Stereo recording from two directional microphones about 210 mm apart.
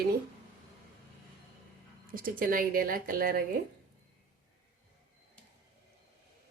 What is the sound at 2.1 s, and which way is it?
Speech, 40° right (ahead or behind).